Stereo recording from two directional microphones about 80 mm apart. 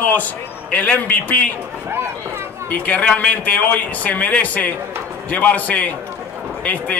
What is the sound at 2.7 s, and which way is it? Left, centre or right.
A man's voice, centre.